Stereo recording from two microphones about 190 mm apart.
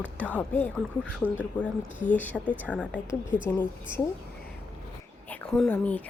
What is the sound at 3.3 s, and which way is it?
Speech, 5° right (ahead or behind).